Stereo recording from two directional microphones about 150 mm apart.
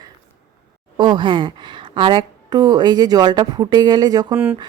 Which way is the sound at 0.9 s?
30° right (ahead or behind).